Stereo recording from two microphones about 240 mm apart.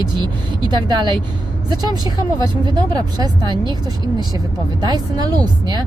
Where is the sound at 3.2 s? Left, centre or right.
Centre.